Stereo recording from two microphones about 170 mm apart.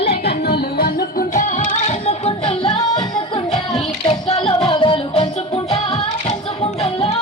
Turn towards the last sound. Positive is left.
turn(degrees=35)  # may be behind; listen again after turning